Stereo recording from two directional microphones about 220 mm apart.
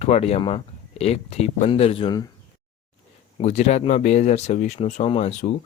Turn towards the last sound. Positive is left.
turn(degrees=30)  # may be behind; listen again after turning